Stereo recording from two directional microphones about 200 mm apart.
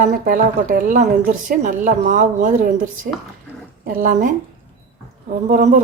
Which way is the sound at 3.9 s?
40° right (ahead or behind).